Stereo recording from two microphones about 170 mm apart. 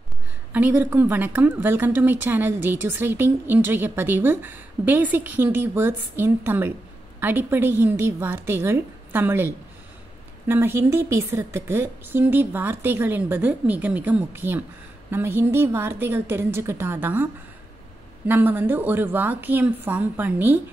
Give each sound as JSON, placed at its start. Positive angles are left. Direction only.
{"t": 0.5, "sound": "a woman's voice", "side_deg": -10}